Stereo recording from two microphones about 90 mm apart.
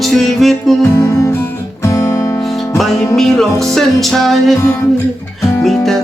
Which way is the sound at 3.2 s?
5° left (ahead or behind).